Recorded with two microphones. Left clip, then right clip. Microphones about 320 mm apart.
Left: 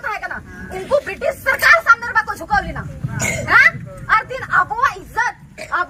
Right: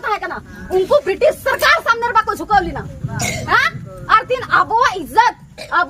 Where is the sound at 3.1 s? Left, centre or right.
Centre.